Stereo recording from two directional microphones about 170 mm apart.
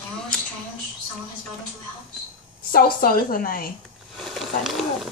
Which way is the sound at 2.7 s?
60° left (ahead or behind).